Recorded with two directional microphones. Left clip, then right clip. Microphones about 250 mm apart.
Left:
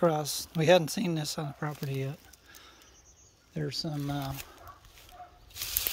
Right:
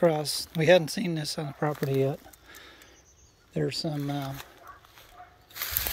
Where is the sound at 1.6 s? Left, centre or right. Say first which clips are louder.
Right 14 dB; centre.